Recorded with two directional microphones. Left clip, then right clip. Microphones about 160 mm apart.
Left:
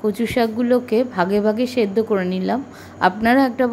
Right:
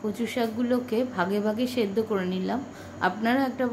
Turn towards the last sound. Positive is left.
turn(degrees=45)  # may be behind; listen again after turning